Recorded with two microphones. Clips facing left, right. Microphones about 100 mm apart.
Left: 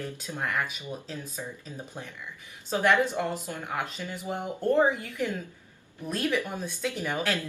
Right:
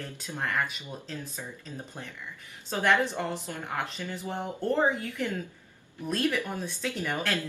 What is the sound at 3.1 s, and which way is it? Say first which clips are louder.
Speech: left 2 dB; 15° left (ahead or behind).